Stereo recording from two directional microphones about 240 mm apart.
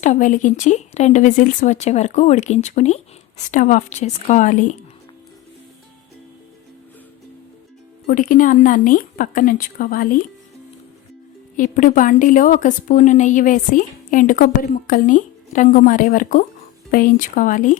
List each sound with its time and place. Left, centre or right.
0.0 s speech: left
8.0 s a woman's voice: left
11.5 s a woman's voice: left